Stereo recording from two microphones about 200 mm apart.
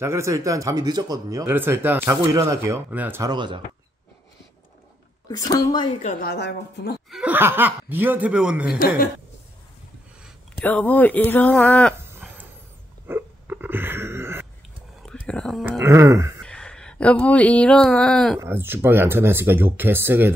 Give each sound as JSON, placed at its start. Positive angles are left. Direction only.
{"t": 0.0, "sound": "speech", "side_deg": -15}
{"t": 5.3, "sound": "a woman's voice", "side_deg": 20}
{"t": 6.2, "sound": "a woman's voice", "side_deg": 55}
{"t": 7.1, "sound": "speech", "side_deg": -5}
{"t": 8.7, "sound": "a woman's voice", "side_deg": 45}
{"t": 10.6, "sound": "speech", "side_deg": 10}
{"t": 12.1, "sound": "a sound", "side_deg": -10}
{"t": 13.0, "sound": "dog", "side_deg": -10}
{"t": 15.0, "sound": "a sound", "side_deg": 5}
{"t": 15.8, "sound": "speech", "side_deg": -15}
{"t": 16.4, "sound": "speech", "side_deg": 5}
{"t": 18.4, "sound": "speech", "side_deg": -10}